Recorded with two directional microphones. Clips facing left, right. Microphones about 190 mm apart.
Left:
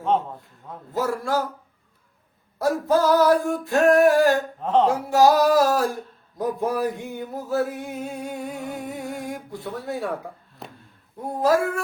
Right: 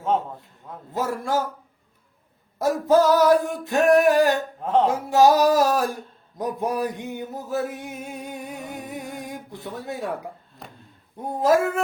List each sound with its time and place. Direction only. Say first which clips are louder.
0.9 s singing: left 1 dB; 20° right (ahead or behind)
2.6 s singing: right 2 dB; 20° right (ahead or behind)
4.6 s a sound: even; 10° right (ahead or behind)
5.1 s singing: even; 20° right (ahead or behind)
6.4 s a sound: left 2 dB; 20° right (ahead or behind)
11.3 s singing: right 1 dB; 20° right (ahead or behind)